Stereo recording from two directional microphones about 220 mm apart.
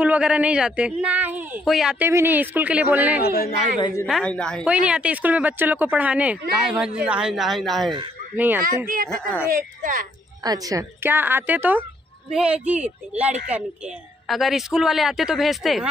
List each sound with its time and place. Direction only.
0.0 s speech: 5° right (ahead or behind)
3.2 s speech: 45° left (ahead or behind)
4.1 s speech: 5° left (ahead or behind)
8.6 s a woman's voice: 40° right (ahead or behind)
10.4 s speech: 15° right (ahead or behind); by 15.9 s centre (ahead or behind)